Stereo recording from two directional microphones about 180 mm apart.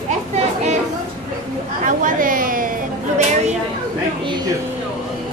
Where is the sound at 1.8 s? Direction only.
45° right (ahead or behind).